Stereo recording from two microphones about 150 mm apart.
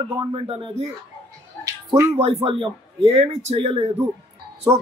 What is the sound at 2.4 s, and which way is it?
Speech, 40° right (ahead or behind).